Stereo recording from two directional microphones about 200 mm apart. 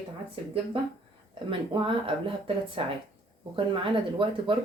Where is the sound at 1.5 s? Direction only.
25° right (ahead or behind).